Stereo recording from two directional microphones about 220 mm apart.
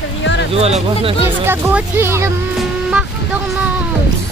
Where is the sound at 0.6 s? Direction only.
30° right (ahead or behind).